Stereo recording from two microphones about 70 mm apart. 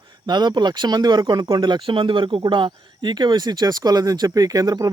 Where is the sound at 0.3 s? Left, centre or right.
Right.